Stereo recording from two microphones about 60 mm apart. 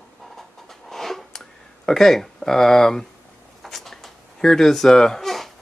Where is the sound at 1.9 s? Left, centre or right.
Centre.